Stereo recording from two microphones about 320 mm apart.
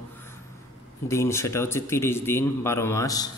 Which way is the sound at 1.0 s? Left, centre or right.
Centre.